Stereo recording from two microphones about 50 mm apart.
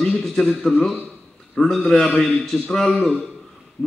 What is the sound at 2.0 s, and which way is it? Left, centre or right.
Speech, centre.